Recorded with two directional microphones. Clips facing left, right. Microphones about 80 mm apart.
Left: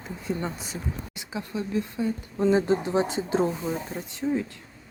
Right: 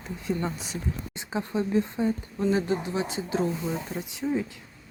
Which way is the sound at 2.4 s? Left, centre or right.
Left.